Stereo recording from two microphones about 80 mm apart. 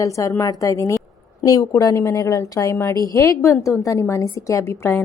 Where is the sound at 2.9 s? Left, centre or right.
Left.